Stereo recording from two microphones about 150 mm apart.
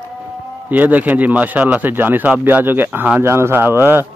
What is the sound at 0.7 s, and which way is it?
Speech, 10° right (ahead or behind).